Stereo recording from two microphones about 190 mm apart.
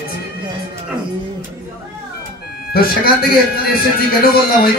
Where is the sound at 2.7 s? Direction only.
50° left (ahead or behind).